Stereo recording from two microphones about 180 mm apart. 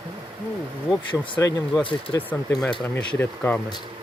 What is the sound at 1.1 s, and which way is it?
Speech, 25° left (ahead or behind).